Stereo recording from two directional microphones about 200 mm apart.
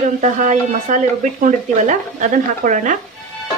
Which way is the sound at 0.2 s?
40° right (ahead or behind).